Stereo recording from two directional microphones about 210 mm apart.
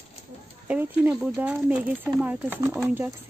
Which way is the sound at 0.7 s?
5° right (ahead or behind).